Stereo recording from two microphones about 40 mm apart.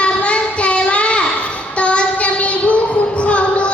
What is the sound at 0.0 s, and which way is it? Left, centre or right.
Child singing, left.